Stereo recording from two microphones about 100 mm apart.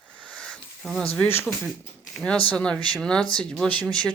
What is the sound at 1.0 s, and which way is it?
Speech, 15° left (ahead or behind).